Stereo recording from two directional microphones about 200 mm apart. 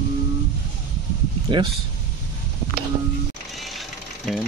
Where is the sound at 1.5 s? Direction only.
25° right (ahead or behind).